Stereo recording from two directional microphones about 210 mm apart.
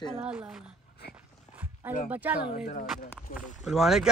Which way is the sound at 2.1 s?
10° right (ahead or behind).